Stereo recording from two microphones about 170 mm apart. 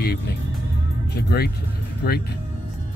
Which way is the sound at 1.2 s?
65° left (ahead or behind).